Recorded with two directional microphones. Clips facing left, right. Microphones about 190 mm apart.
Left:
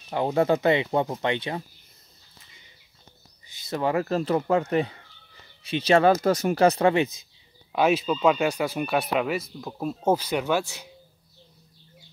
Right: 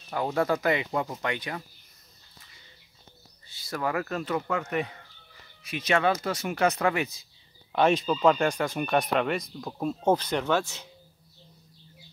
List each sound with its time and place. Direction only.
0.1 s speech: 20° left (ahead or behind)
3.4 s speech: 20° left (ahead or behind)
7.7 s speech: 5° left (ahead or behind)